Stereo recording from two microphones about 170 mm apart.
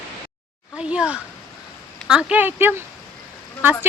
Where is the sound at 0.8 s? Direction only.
5° right (ahead or behind).